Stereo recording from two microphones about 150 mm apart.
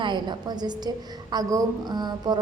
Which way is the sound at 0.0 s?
30° right (ahead or behind).